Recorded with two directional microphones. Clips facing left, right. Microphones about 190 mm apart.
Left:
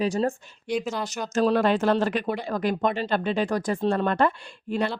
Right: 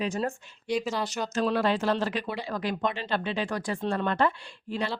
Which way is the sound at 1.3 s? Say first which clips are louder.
Left 5 dB; 45° left (ahead or behind).